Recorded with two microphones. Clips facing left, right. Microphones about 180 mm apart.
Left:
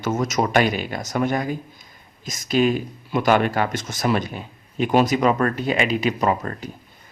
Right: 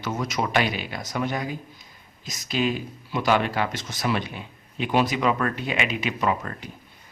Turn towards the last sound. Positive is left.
turn(degrees=40)  # may be behind; listen again after turning